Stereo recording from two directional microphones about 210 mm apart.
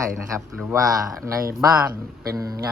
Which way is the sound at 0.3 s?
15° right (ahead or behind).